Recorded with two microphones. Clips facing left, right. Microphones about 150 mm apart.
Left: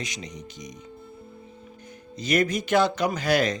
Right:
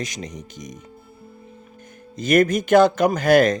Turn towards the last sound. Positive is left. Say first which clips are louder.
# right 8 dB
turn(degrees=-50)  # may be behind; listen again after turning